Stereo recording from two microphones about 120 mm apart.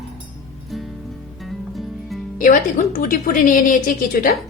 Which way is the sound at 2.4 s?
90° left.